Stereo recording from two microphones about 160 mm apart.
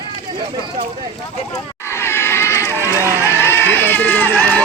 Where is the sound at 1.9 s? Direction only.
15° left (ahead or behind).